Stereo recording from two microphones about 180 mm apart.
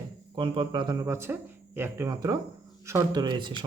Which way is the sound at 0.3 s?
30° right (ahead or behind).